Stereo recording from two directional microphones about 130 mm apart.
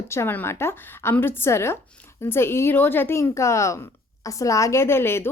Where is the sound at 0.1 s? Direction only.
20° left (ahead or behind).